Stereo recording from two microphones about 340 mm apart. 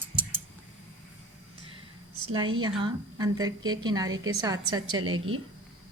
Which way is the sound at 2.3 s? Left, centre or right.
Centre.